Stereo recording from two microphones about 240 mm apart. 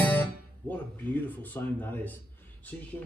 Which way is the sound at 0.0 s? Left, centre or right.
Centre.